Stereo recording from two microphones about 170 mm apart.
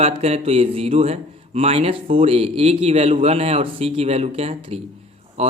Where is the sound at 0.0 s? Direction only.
35° right (ahead or behind).